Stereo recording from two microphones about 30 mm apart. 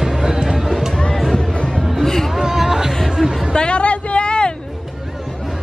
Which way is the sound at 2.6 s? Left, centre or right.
Centre.